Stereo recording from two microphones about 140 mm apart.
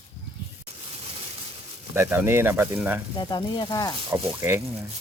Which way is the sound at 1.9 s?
15° right (ahead or behind).